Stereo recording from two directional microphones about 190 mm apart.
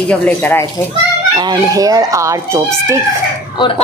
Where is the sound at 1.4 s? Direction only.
20° right (ahead or behind).